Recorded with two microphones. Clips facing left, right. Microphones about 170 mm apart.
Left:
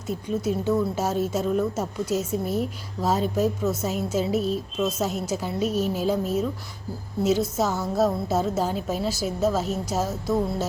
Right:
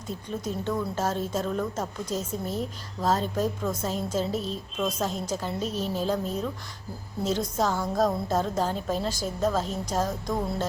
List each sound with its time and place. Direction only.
0.1 s speech: 10° left (ahead or behind)